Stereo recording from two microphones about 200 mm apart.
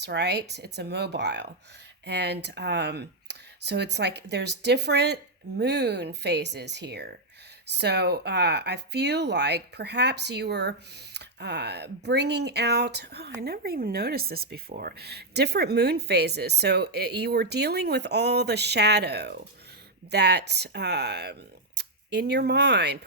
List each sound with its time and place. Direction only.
0.0 s speech: 55° right (ahead or behind)